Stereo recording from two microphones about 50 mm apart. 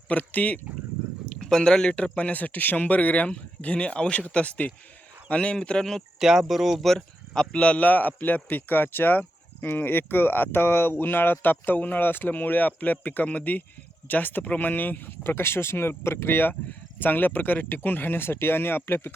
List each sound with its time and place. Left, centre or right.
0.1 s speech: left
1.4 s speech: centre
2.1 s speech: left
4.4 s a man's voice: left; by 6.0 s centre
6.1 s speech: centre
6.8 s a sound: centre
7.5 s speech: left